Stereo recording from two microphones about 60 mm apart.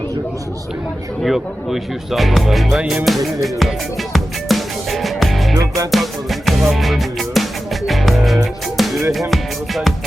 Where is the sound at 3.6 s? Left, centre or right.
Centre.